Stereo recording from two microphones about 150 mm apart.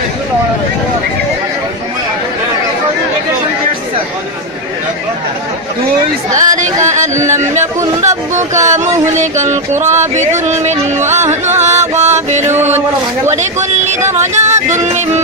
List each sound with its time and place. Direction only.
6.3 s speech: 55° right (ahead or behind)
7.2 s speech: 20° right (ahead or behind)
8.0 s music: 50° right (ahead or behind)
11.2 s a man's voice: 15° right (ahead or behind)
11.6 s music: 50° right (ahead or behind)
12.7 s a man's voice: 15° right (ahead or behind)
13.4 s music: 50° right (ahead or behind)